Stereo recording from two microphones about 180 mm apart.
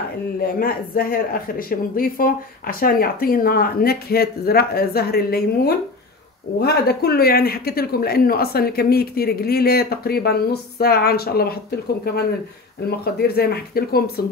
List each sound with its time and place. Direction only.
0.4 s speech: 55° left (ahead or behind)